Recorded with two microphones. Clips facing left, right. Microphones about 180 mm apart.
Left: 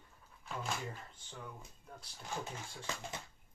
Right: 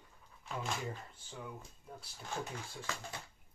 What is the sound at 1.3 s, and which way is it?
Speech, 5° right (ahead or behind).